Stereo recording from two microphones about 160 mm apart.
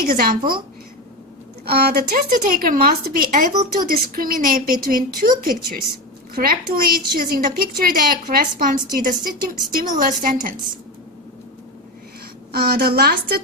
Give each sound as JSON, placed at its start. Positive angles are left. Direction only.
{"t": 0.1, "sound": "a woman's voice", "side_deg": -65}
{"t": 1.6, "sound": "a woman's voice", "side_deg": -75}
{"t": 12.5, "sound": "speech", "side_deg": -75}